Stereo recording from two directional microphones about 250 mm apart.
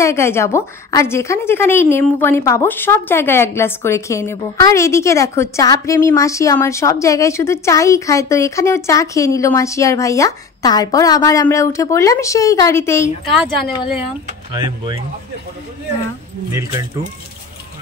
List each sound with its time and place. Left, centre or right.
0.0 s a woman's voice: centre
14.5 s speech: centre